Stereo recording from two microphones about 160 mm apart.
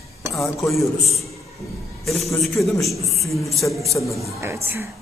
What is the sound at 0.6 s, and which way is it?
A man's voice, centre (ahead or behind).